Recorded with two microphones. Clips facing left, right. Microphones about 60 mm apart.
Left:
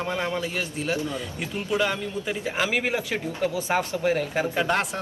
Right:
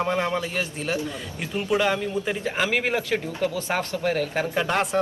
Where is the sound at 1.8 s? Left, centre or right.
Centre.